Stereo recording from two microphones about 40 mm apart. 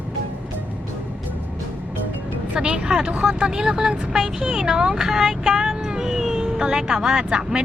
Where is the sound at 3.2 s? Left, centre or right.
Right.